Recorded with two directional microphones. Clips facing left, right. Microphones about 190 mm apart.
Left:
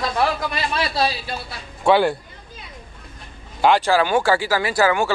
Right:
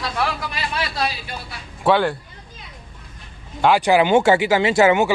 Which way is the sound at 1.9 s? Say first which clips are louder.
Left 1 dB; 5° left (ahead or behind).